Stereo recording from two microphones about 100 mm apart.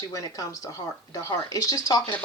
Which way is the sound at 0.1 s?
35° left (ahead or behind).